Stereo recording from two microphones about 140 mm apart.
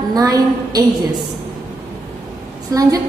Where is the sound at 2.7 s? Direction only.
25° right (ahead or behind).